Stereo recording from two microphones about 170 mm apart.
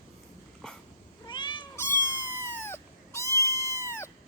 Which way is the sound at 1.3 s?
25° left (ahead or behind).